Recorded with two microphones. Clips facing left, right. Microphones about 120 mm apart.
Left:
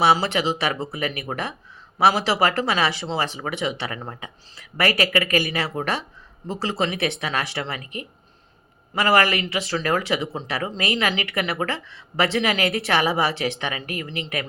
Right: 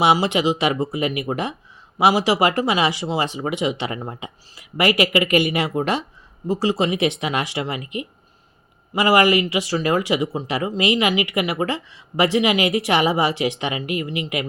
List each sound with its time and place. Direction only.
0.0 s speech: 15° right (ahead or behind)